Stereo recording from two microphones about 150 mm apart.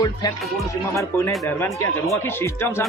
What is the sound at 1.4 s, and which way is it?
Speech, 15° left (ahead or behind).